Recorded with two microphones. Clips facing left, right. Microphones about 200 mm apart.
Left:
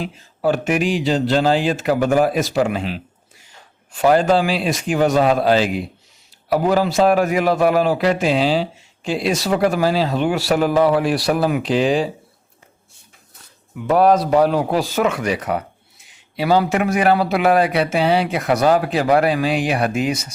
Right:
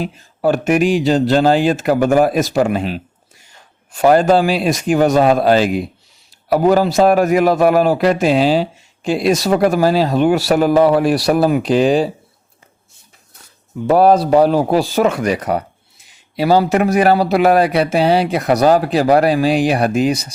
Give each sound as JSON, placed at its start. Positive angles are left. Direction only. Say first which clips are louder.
{"t": 0.0, "sound": "speech", "louder": "right 3 dB", "side_deg": -45}
{"t": 13.8, "sound": "speech", "louder": "right 3 dB", "side_deg": -35}